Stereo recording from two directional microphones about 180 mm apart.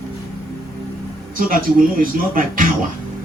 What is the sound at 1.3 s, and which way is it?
Speech, 50° right (ahead or behind).